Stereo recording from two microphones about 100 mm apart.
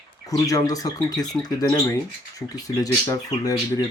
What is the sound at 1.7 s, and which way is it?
Speech, 25° left (ahead or behind).